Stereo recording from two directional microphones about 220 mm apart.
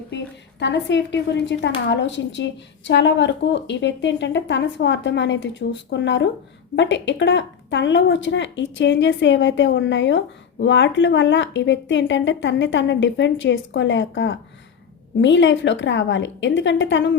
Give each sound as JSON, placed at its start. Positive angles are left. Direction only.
{"t": 0.6, "sound": "a woman's voice", "side_deg": 55}